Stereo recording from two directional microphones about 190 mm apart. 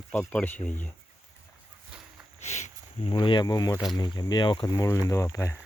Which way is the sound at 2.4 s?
35° left (ahead or behind).